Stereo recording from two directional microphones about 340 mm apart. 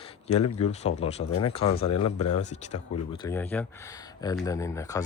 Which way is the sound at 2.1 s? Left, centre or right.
Left.